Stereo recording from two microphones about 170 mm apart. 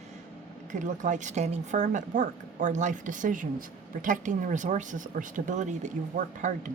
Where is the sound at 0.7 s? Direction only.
50° right (ahead or behind).